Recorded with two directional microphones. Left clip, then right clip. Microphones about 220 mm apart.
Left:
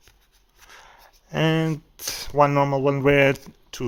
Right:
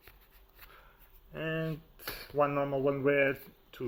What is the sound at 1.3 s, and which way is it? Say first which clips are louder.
Speech: left 13 dB; 45° left (ahead or behind).